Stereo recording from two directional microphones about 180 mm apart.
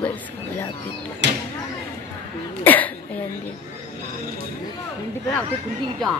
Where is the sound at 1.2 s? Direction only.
75° right (ahead or behind).